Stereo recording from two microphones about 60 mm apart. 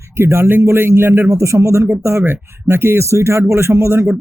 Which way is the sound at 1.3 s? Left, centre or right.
Right.